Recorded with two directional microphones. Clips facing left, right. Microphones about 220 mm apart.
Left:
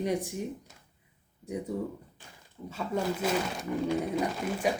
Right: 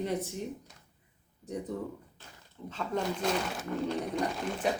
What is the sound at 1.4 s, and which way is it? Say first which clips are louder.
Speech: left 2 dB; 10° left (ahead or behind).